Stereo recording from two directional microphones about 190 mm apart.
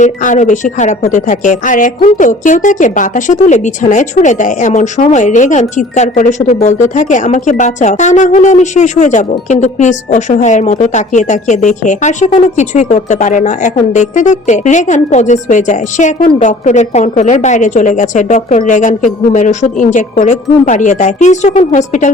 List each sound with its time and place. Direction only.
0.0 s a woman's voice: 40° left (ahead or behind)